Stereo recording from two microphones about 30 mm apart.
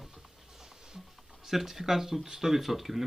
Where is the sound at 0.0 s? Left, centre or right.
Centre.